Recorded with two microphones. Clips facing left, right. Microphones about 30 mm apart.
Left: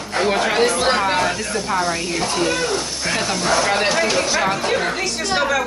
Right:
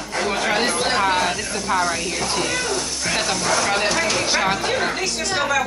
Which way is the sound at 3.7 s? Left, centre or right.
Centre.